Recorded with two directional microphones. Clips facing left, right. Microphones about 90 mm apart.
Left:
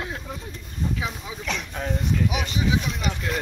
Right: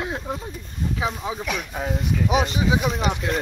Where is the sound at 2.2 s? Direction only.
35° right (ahead or behind).